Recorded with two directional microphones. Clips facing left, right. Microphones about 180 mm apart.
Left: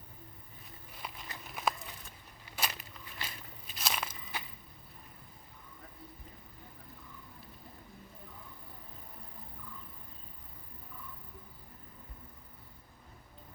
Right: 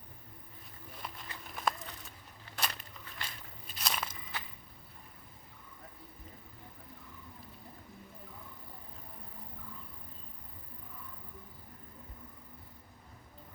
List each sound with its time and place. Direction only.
1.0 s walk: 5° left (ahead or behind)
1.5 s a sound: 5° left (ahead or behind)
2.6 s walk: 5° left (ahead or behind)